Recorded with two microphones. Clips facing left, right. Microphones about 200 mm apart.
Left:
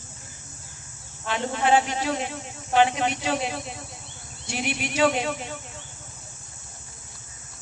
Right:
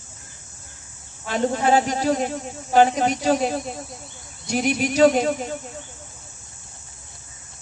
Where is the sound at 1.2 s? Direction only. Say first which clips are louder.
Right 4 dB; 40° right (ahead or behind).